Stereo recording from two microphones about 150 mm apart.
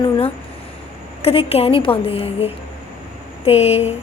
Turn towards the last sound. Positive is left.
turn(degrees=45)  # may be behind; listen again after turning